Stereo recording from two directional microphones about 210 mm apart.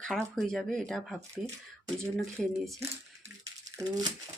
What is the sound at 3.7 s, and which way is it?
Speech, 15° right (ahead or behind).